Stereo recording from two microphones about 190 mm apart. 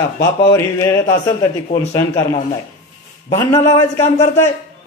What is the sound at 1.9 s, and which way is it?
Speech, 15° left (ahead or behind).